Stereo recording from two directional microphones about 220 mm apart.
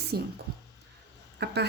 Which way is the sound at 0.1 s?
45° right (ahead or behind).